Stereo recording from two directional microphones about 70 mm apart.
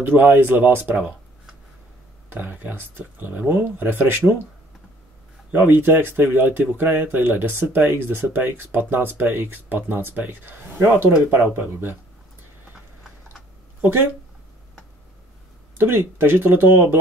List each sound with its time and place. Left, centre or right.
0.0 s speech: right
2.2 s speech: right
5.5 s speech: right
13.7 s speech: right
15.8 s speech: right